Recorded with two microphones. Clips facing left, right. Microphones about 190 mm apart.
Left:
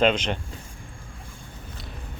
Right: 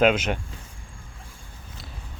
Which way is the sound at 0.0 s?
5° right (ahead or behind).